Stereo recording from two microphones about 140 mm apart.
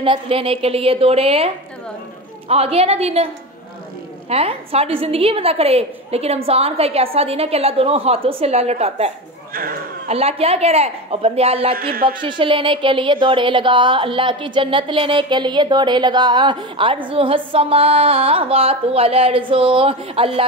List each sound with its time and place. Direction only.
0.0 s a woman's voice: 40° right (ahead or behind)
4.3 s a woman's voice: 45° right (ahead or behind)
9.5 s speech: 90° right
10.0 s a woman's voice: 45° right (ahead or behind)
11.7 s speech: 90° right
12.2 s speech: 35° right (ahead or behind)